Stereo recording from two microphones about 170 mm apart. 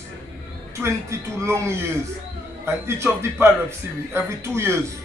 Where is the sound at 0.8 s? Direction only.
15° right (ahead or behind).